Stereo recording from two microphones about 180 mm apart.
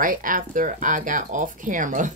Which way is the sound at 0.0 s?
50° right (ahead or behind).